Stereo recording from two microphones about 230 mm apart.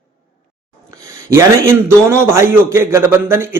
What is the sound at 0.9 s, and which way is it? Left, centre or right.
Speech, centre.